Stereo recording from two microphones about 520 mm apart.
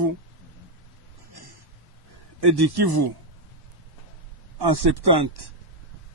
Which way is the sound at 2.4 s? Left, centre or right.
Right.